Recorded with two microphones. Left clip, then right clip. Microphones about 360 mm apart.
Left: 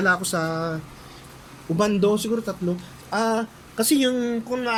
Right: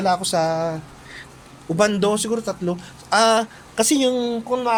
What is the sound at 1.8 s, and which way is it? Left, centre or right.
Speech, right.